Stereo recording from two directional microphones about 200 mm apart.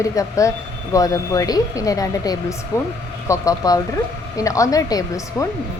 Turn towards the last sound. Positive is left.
turn(degrees=15)  # may be behind; listen again after turning